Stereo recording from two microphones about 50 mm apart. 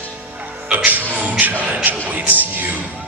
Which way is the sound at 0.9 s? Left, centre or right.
Right.